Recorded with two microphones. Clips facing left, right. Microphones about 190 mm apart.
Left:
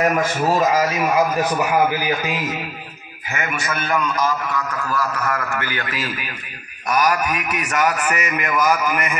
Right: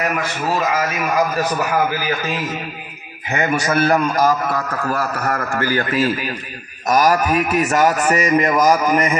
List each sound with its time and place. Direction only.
0.0 s a man's voice: 45° left (ahead or behind)
0.7 s a man's voice: 20° left (ahead or behind)
3.3 s a man's voice: 30° right (ahead or behind)